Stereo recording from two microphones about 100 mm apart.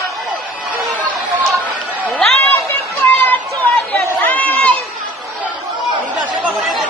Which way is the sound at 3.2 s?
15° left (ahead or behind).